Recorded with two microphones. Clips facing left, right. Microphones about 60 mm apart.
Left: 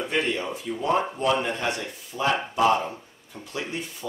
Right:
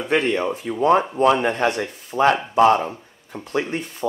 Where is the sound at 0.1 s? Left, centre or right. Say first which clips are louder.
Right 9 dB; right.